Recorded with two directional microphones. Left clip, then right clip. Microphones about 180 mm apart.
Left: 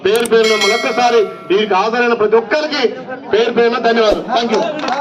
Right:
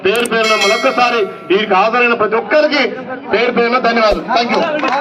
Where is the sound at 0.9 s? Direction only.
25° right (ahead or behind).